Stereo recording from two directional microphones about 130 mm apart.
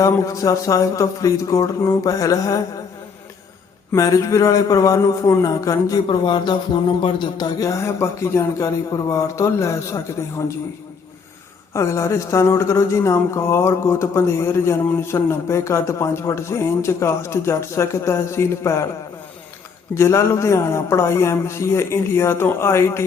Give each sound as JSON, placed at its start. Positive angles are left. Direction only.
{"t": 0.0, "sound": "speech", "side_deg": 25}
{"t": 3.9, "sound": "speech", "side_deg": 25}
{"t": 6.1, "sound": "speech", "side_deg": 35}
{"t": 11.7, "sound": "speech", "side_deg": 20}
{"t": 19.9, "sound": "speech", "side_deg": 20}